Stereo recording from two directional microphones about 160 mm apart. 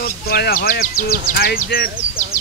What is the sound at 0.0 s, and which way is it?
Speech, 70° left (ahead or behind).